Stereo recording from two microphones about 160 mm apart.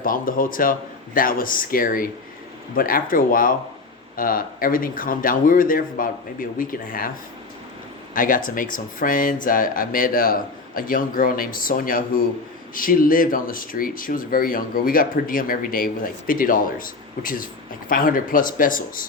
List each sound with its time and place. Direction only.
0.0 s speech: 60° left (ahead or behind)
8.1 s speech: 60° left (ahead or behind)